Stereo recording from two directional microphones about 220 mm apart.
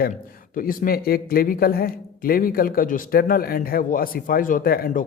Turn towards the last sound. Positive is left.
turn(degrees=40)  # may be behind; listen again after turning